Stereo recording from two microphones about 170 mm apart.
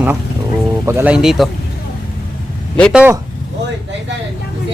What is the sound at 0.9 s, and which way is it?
Speech, 10° right (ahead or behind).